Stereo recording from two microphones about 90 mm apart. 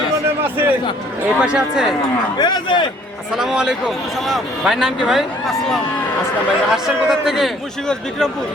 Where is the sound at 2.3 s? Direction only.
55° left (ahead or behind).